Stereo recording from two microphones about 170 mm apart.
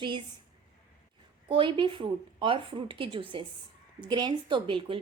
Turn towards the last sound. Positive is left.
turn(degrees=-30)  # may be behind; listen again after turning